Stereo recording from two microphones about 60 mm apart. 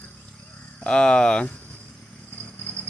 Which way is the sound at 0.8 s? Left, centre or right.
Centre.